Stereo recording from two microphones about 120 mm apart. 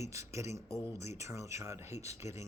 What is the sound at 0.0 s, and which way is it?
Speech, 25° right (ahead or behind).